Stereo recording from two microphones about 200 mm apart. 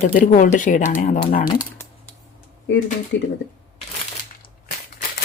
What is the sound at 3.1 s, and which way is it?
Speech, 60° left (ahead or behind).